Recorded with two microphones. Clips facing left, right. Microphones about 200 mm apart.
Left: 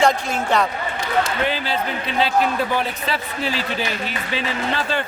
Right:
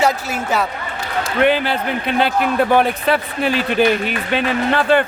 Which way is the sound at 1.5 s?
60° right (ahead or behind).